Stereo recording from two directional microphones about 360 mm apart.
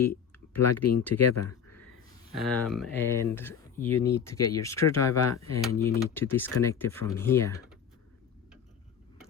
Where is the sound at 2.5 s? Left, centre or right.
Centre.